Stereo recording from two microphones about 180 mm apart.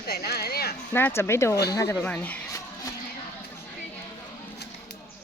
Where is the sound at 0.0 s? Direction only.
60° left (ahead or behind).